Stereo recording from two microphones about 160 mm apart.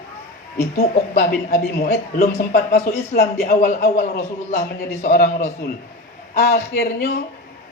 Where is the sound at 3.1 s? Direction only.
85° left.